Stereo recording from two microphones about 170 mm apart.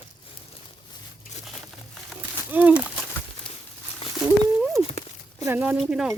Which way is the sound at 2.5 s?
10° right (ahead or behind).